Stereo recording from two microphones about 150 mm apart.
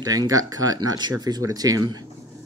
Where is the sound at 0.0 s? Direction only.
25° right (ahead or behind).